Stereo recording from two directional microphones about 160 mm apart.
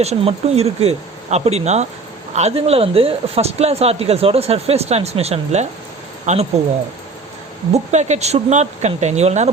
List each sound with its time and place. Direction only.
0.0 s speech: 40° right (ahead or behind)
7.7 s speech: 45° right (ahead or behind)